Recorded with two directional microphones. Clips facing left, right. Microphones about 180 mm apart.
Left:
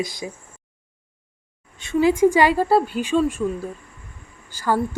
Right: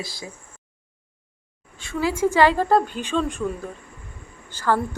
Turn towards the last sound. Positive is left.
turn(degrees=10)  # may be behind; listen again after turning